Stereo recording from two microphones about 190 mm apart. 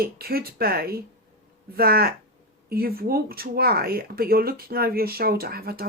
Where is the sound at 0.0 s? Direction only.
55° right (ahead or behind).